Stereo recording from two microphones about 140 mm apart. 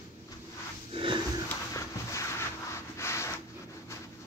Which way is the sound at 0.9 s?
40° right (ahead or behind).